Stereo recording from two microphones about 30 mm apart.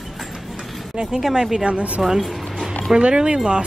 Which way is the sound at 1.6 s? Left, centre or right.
Right.